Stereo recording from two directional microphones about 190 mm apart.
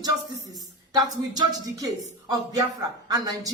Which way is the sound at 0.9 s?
20° right (ahead or behind).